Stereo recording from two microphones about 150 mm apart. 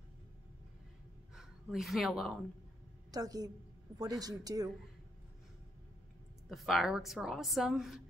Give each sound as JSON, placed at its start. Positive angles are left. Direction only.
{"t": 1.3, "sound": "speech", "side_deg": -5}
{"t": 3.1, "sound": "speech", "side_deg": -25}
{"t": 6.5, "sound": "a woman's voice", "side_deg": 0}